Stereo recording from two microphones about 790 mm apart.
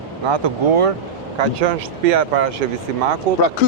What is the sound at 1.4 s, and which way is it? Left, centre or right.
Speech, right.